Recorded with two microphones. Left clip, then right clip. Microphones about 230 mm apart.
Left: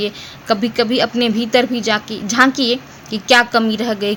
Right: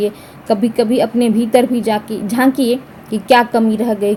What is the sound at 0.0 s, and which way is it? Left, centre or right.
A woman's voice, centre.